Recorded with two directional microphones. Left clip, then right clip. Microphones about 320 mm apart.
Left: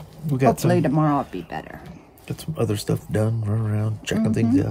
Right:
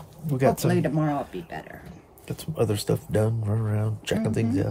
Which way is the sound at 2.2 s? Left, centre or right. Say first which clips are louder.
Even; centre.